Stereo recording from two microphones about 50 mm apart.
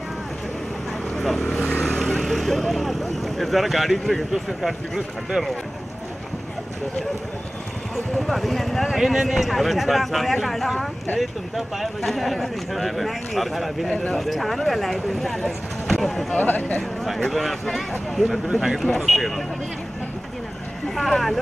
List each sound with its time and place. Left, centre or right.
1.1 s vehicle: centre
1.9 s speech: centre
7.9 s speech: centre
13.8 s speech: centre
14.1 s speech: centre
16.3 s speech: left
17.3 s speech: centre
20.9 s speech: centre